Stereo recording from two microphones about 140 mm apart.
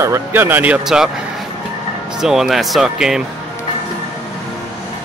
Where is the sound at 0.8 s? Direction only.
5° right (ahead or behind).